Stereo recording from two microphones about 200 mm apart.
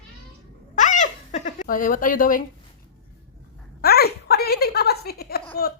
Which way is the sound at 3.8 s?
50° left (ahead or behind).